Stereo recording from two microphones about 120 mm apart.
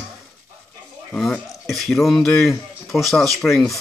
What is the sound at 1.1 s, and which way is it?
Speech, 5° left (ahead or behind).